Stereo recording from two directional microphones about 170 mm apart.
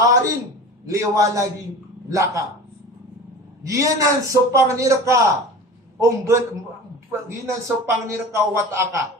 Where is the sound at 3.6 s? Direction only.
20° right (ahead or behind).